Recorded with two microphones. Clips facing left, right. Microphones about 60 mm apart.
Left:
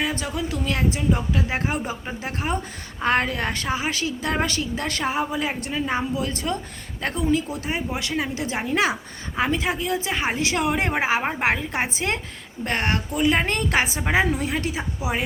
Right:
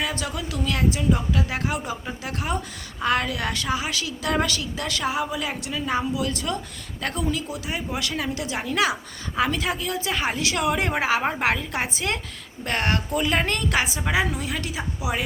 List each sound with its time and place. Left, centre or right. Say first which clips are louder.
0.0 s a woman's voice: left 2 dB; left
11.2 s speech: right 1 dB; centre
11.4 s a woman's voice: left 1 dB; left
13.5 s a woman's voice: left 2 dB; left